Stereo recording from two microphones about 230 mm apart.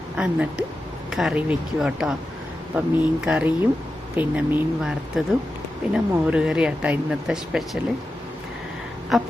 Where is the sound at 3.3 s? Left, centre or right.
Centre.